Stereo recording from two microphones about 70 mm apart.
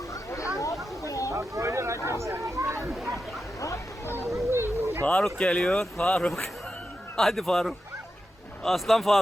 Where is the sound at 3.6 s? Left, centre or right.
Left.